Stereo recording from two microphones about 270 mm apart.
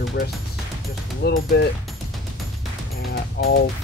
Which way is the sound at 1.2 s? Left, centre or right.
Left.